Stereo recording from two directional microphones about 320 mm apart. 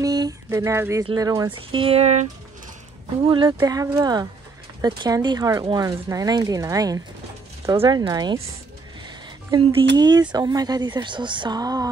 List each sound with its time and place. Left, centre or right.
0.0 s speech: centre
3.3 s speech: centre
9.5 s speech: centre